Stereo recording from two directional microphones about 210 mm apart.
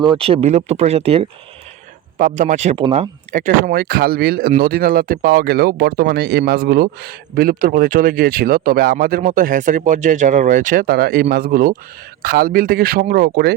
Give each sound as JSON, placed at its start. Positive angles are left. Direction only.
{"t": 0.0, "sound": "speech", "side_deg": -25}
{"t": 2.1, "sound": "speech", "side_deg": -40}